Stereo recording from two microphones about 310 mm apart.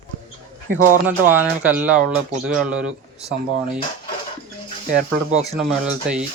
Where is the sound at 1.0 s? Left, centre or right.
Centre.